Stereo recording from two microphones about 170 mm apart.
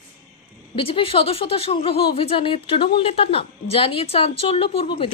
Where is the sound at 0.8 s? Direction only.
30° left (ahead or behind).